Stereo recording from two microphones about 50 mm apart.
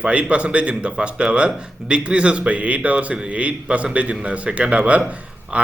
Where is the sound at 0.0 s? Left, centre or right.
Right.